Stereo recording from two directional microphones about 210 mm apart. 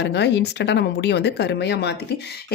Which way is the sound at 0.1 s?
55° left (ahead or behind).